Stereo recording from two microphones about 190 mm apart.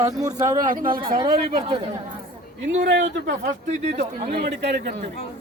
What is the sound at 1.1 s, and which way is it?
Speech, 25° right (ahead or behind).